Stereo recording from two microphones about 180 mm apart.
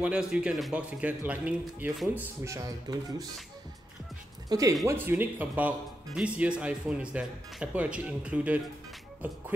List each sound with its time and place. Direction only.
0.0 s speech: 5° right (ahead or behind); by 3.3 s 20° right (ahead or behind)
4.5 s speech: 20° right (ahead or behind)